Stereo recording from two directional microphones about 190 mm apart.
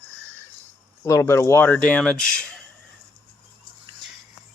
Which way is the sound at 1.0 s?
15° left (ahead or behind).